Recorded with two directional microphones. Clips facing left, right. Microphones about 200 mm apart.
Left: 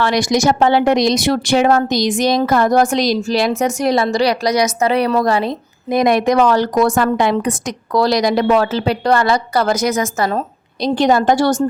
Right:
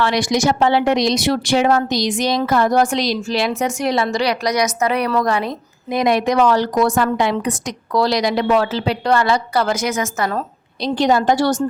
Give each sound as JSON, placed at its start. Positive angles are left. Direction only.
{"t": 0.0, "sound": "speech", "side_deg": 45}
{"t": 5.9, "sound": "speech", "side_deg": 50}
{"t": 10.8, "sound": "speech", "side_deg": 50}